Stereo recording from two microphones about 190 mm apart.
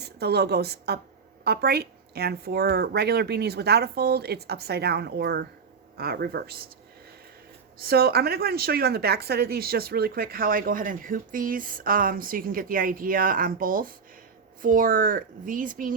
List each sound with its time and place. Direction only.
0.0 s a woman's voice: 55° right (ahead or behind)
7.8 s speech: 55° right (ahead or behind)